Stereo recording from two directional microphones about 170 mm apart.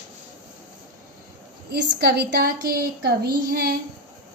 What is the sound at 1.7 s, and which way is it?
A woman's voice, 70° right (ahead or behind).